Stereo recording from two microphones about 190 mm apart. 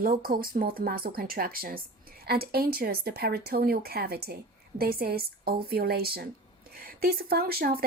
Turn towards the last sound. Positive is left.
turn(degrees=-50)  # may be behind; listen again after turning